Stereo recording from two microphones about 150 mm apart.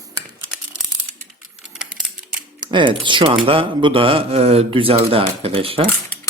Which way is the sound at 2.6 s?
30° right (ahead or behind).